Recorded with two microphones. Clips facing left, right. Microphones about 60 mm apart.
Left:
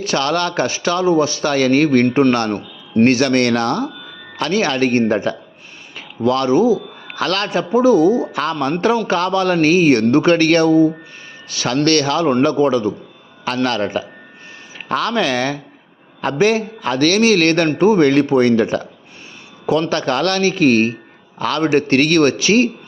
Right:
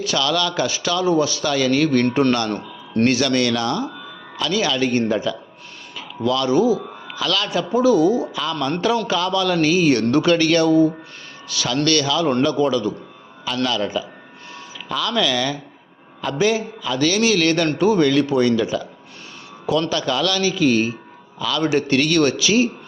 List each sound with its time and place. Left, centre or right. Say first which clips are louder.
0.0 s a man's voice: left 3 dB; left
3.1 s a man's voice: left 2 dB; left
7.1 s a man's voice: left 3 dB; left
7.7 s a man's voice: left 3 dB; left
8.3 s a man's voice: left 4 dB; left
13.7 s a man's voice: left 3 dB; left
19.9 s a man's voice: left 3 dB; left